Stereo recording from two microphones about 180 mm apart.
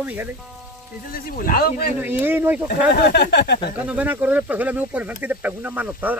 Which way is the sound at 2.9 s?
65° left (ahead or behind).